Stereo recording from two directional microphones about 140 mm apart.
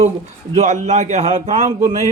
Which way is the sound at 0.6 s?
55° right (ahead or behind).